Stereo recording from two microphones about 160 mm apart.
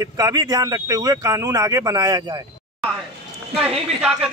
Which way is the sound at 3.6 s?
10° right (ahead or behind).